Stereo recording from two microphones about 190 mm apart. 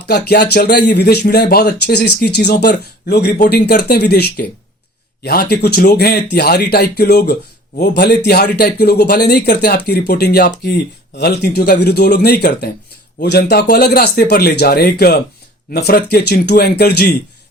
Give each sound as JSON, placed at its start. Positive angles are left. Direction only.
{"t": 0.0, "sound": "speech", "side_deg": 60}